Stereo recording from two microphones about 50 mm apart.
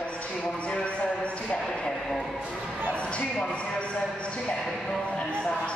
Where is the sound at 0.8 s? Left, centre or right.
Left.